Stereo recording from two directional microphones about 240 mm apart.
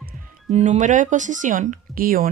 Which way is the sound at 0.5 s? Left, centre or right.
Right.